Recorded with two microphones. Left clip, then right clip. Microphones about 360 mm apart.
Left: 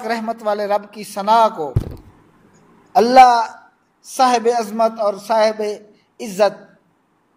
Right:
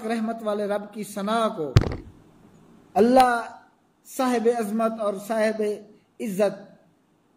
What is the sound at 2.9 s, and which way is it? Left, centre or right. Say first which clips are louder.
A man's voice: left 9 dB; left.